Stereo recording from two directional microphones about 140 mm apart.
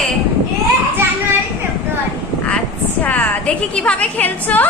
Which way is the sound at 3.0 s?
10° left (ahead or behind).